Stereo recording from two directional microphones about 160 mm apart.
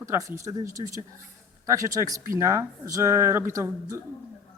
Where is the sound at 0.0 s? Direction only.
20° right (ahead or behind).